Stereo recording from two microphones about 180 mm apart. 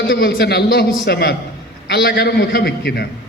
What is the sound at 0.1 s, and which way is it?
Mantra, 60° left (ahead or behind).